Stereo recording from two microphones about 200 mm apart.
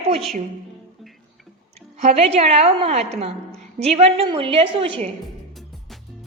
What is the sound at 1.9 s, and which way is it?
A woman's voice, 30° right (ahead or behind).